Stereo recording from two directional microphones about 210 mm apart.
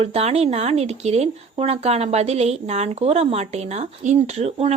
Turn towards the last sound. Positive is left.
turn(degrees=-30)  # may be behind; listen again after turning